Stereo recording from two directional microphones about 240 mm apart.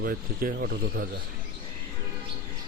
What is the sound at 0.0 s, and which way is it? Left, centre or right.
Speech, right.